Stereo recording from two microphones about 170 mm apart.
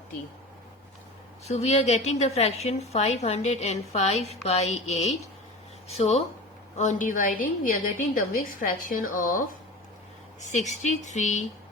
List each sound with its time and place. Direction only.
1.5 s a woman's voice: 40° left (ahead or behind)
10.4 s a woman's voice: 45° left (ahead or behind)